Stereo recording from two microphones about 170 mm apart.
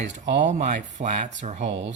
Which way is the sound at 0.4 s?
45° right (ahead or behind).